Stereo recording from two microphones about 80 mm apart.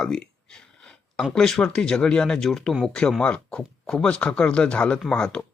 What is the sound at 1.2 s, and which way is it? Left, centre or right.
Speech, centre.